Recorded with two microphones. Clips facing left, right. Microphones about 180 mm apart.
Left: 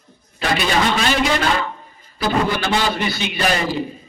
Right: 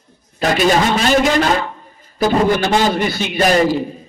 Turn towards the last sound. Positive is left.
turn(degrees=-45)  # may be behind; listen again after turning